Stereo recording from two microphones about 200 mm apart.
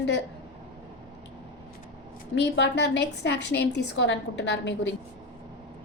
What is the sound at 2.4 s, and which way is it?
A woman's voice, 60° left (ahead or behind).